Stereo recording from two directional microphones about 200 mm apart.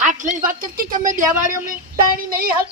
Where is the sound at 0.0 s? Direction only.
40° right (ahead or behind).